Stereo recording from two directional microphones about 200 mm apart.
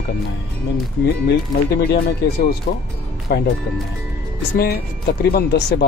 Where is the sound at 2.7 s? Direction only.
40° left (ahead or behind).